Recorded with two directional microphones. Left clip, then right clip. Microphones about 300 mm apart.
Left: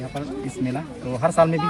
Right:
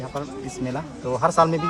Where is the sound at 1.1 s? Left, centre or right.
Centre.